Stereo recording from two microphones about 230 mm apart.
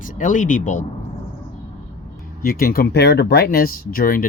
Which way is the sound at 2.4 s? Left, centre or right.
Left.